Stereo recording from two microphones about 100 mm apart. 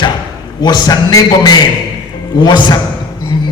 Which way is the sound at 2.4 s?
50° left (ahead or behind).